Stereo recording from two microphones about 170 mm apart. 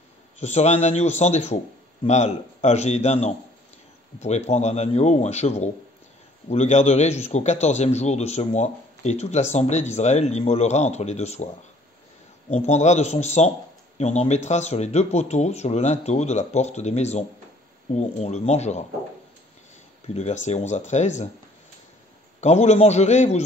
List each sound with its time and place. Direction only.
0.4 s a man's voice: 40° left (ahead or behind)
12.4 s a man's voice: 40° left (ahead or behind)
20.2 s speech: 40° left (ahead or behind)
22.4 s a man's voice: 40° left (ahead or behind)